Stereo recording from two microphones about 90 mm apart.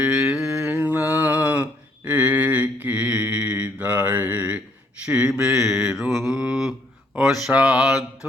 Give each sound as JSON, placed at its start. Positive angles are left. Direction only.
{"t": 0.0, "sound": "mantra", "side_deg": -10}
{"t": 0.4, "sound": "mantra", "side_deg": -30}
{"t": 7.2, "sound": "a sound", "side_deg": -5}
{"t": 7.5, "sound": "mantra", "side_deg": -10}